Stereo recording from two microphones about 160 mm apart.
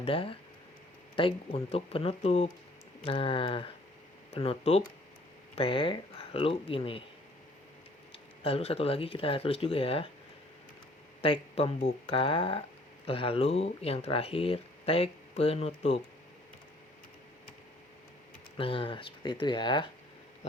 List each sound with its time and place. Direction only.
0.0 s speech: 35° left (ahead or behind)
8.4 s speech: 40° left (ahead or behind)
11.2 s speech: 35° left (ahead or behind)
18.5 s speech: 35° left (ahead or behind)